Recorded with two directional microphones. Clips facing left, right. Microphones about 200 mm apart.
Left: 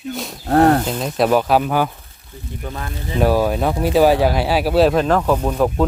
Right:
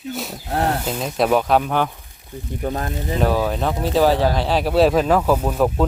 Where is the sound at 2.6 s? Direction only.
40° right (ahead or behind).